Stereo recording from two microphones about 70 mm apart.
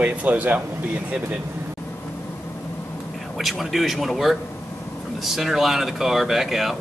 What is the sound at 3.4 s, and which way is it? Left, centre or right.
A man's voice, centre.